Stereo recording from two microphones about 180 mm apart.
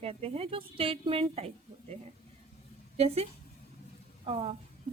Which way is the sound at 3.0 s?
35° right (ahead or behind).